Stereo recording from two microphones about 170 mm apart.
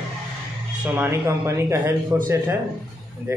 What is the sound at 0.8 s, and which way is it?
Speech, 10° right (ahead or behind).